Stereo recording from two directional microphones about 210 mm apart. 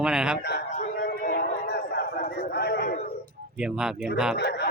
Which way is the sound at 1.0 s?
45° left (ahead or behind).